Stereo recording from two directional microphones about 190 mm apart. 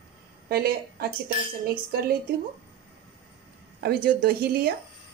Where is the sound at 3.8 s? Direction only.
50° right (ahead or behind).